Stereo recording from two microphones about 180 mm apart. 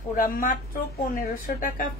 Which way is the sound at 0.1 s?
50° left (ahead or behind).